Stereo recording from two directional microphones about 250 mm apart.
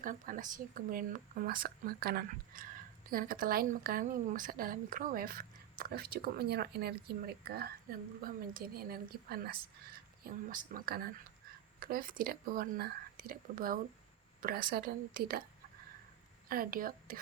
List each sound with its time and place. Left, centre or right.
0.0 s a woman's voice: right
16.5 s a woman's voice: right